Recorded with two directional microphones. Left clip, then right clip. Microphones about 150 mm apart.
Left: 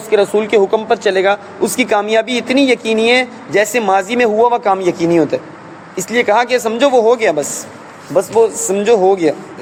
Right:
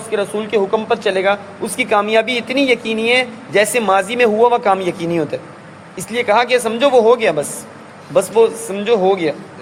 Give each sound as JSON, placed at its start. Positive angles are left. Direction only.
{"t": 0.1, "sound": "speech", "side_deg": 45}